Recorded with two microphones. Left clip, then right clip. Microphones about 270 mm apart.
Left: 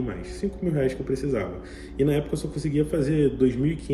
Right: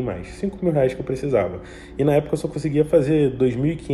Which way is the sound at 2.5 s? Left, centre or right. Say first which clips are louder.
Right 8 dB; centre.